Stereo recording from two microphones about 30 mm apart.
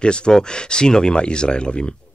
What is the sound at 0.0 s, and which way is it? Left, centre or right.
Speech, left.